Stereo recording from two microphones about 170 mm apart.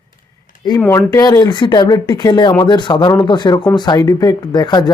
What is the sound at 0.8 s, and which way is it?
Speech, 15° left (ahead or behind).